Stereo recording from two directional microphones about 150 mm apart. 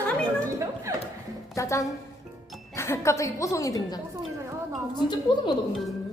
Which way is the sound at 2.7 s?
20° left (ahead or behind).